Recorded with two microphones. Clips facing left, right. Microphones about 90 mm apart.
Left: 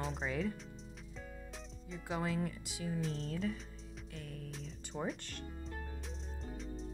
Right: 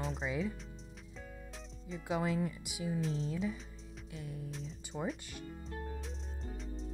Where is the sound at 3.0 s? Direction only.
Centre (ahead or behind).